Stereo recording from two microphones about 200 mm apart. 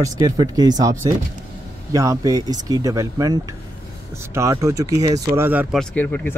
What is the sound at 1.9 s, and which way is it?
Speech, 15° right (ahead or behind).